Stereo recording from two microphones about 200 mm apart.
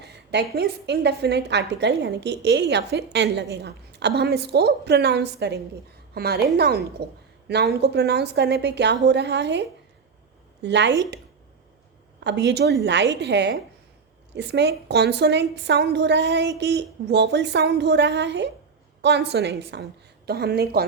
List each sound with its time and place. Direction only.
0.0 s a woman's voice: 55° right (ahead or behind)
12.2 s a woman's voice: 60° right (ahead or behind)